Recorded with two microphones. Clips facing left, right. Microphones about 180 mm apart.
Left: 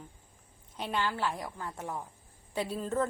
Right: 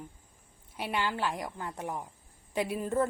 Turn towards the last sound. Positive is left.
turn(degrees=-10)  # may be behind; listen again after turning